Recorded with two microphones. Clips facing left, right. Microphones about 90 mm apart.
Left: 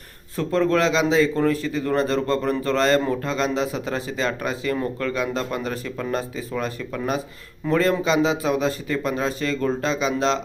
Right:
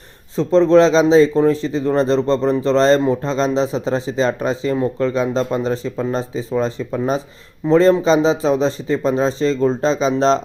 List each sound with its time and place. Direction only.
0.3 s speech: 25° right (ahead or behind)